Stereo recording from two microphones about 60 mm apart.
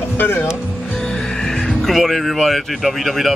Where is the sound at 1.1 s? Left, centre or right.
Centre.